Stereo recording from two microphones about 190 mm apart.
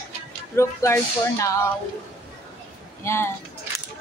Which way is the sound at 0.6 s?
15° left (ahead or behind).